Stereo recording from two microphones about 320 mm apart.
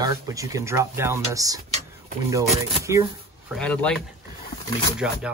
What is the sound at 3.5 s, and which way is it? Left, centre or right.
Speech, centre.